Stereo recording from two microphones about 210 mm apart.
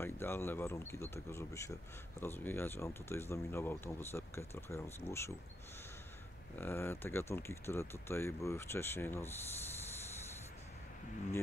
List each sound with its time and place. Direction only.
0.0 s speech: 10° left (ahead or behind)
6.5 s speech: 10° left (ahead or behind)